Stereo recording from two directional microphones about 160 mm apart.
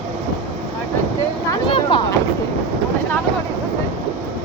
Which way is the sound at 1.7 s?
30° left (ahead or behind).